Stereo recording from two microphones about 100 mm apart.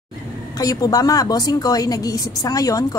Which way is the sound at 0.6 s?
40° left (ahead or behind).